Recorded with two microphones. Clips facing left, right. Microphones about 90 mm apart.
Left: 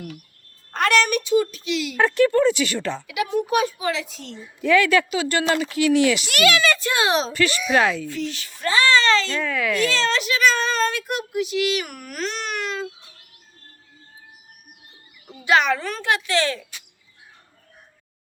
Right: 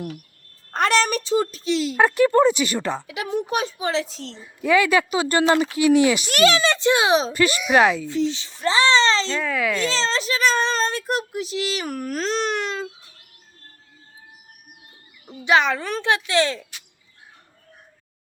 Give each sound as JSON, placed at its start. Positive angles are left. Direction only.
{"t": 0.7, "sound": "a child's voice", "side_deg": -35}
{"t": 2.0, "sound": "speech", "side_deg": -15}
{"t": 3.1, "sound": "a child's voice", "side_deg": -30}
{"t": 4.6, "sound": "speech", "side_deg": -15}
{"t": 5.3, "sound": "speech", "side_deg": -25}
{"t": 6.2, "sound": "speech", "side_deg": -35}
{"t": 9.4, "sound": "speech", "side_deg": -5}
{"t": 9.7, "sound": "a child's voice", "side_deg": -25}
{"t": 15.4, "sound": "speech", "side_deg": -20}